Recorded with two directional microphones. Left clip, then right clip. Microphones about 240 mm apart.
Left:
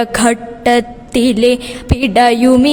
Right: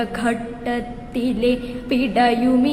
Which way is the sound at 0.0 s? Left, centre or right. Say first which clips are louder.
Left 9 dB; left.